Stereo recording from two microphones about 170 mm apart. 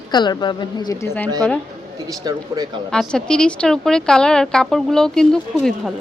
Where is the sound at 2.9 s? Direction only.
5° left (ahead or behind).